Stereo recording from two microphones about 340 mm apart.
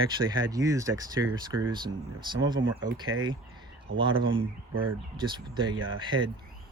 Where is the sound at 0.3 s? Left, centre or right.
Centre.